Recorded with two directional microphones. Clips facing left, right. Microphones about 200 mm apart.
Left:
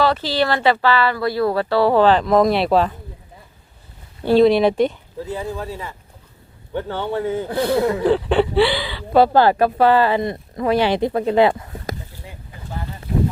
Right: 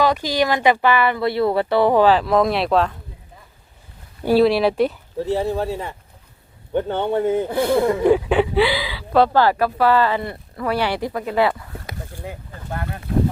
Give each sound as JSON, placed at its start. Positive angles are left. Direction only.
{"t": 0.0, "sound": "speech", "side_deg": -15}
{"t": 4.3, "sound": "speech", "side_deg": -5}
{"t": 5.4, "sound": "speech", "side_deg": -30}
{"t": 6.7, "sound": "speech", "side_deg": -20}
{"t": 7.7, "sound": "speech", "side_deg": 5}
{"t": 8.0, "sound": "speech", "side_deg": -10}
{"t": 9.3, "sound": "speech", "side_deg": 20}
{"t": 12.1, "sound": "a sound", "side_deg": -55}
{"t": 12.7, "sound": "speech", "side_deg": -65}